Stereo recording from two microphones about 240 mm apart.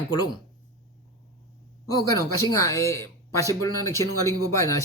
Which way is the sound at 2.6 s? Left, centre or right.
Centre.